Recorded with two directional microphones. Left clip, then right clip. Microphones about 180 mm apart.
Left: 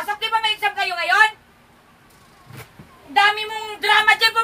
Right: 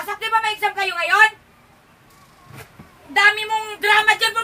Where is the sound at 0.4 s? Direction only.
20° right (ahead or behind).